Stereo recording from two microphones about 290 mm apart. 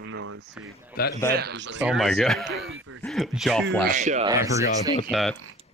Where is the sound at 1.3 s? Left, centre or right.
Right.